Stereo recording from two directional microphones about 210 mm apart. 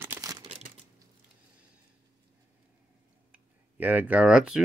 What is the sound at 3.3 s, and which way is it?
Tick-tock, 10° right (ahead or behind).